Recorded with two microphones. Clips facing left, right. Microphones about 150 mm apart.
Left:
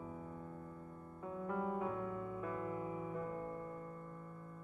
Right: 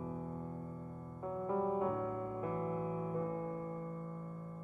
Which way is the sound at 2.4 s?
30° right (ahead or behind).